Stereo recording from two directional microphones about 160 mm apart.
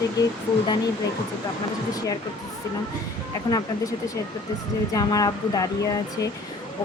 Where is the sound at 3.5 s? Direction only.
20° left (ahead or behind).